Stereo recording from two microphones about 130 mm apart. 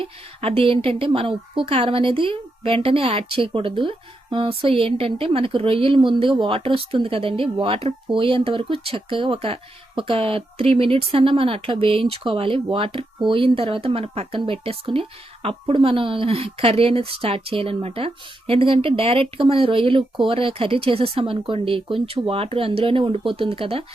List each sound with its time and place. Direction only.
0.0 s a woman's voice: 45° right (ahead or behind)